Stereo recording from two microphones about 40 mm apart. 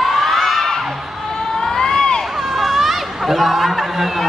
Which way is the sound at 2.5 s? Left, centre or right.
Centre.